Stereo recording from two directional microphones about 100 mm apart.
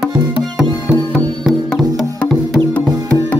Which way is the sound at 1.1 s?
5° left (ahead or behind).